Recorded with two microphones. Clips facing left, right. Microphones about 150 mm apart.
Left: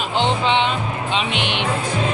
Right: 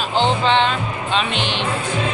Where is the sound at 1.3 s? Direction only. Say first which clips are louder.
Even; 65° left (ahead or behind).